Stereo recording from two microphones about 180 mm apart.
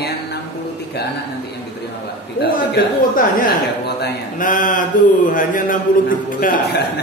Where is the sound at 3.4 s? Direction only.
55° left (ahead or behind).